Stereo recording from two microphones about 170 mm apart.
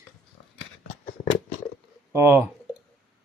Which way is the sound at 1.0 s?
45° left (ahead or behind).